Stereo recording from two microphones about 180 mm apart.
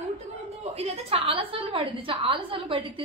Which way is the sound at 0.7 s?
35° right (ahead or behind).